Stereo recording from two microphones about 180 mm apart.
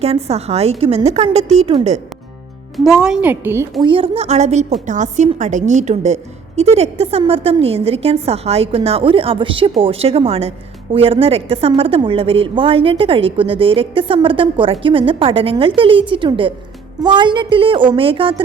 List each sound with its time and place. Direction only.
0.0 s a woman's voice: 35° right (ahead or behind)
2.7 s a woman's voice: centre (ahead or behind)
3.8 s a woman's voice: 30° right (ahead or behind)